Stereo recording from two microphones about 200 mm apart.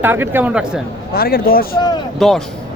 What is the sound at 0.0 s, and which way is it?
Speech, 10° right (ahead or behind).